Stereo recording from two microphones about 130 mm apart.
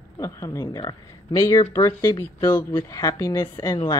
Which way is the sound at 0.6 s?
35° left (ahead or behind).